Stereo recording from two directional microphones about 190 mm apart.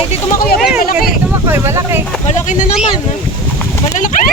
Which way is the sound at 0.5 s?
5° right (ahead or behind).